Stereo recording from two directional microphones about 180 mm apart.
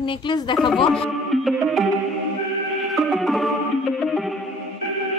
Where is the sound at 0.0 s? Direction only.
25° left (ahead or behind).